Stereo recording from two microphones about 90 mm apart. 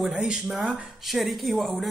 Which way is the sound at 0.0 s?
5° right (ahead or behind).